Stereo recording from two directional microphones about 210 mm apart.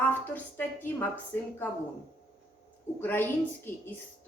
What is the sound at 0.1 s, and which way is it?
A woman's voice, 10° left (ahead or behind).